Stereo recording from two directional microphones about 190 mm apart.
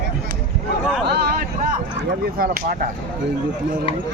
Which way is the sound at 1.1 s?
55° right (ahead or behind).